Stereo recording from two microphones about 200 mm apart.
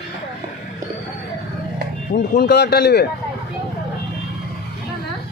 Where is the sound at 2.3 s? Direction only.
55° left (ahead or behind).